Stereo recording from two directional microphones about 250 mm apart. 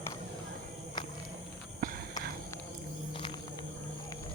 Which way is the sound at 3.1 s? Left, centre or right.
Centre.